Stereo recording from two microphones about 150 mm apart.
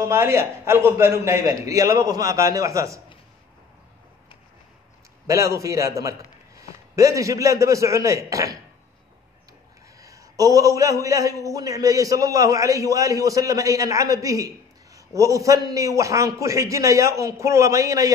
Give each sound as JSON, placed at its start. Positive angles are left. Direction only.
{"t": 0.0, "sound": "a man's voice", "side_deg": -20}
{"t": 5.2, "sound": "a man's voice", "side_deg": -20}
{"t": 9.9, "sound": "a man's voice", "side_deg": -20}